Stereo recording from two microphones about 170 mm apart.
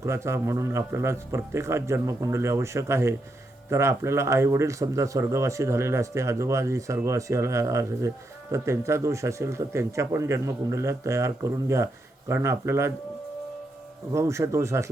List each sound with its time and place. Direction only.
0.0 s speech: 15° right (ahead or behind)
14.1 s speech: 15° right (ahead or behind)